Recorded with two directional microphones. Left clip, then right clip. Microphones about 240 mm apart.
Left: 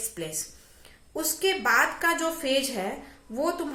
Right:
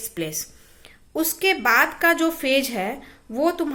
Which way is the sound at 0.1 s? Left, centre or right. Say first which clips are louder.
Right 6 dB; right.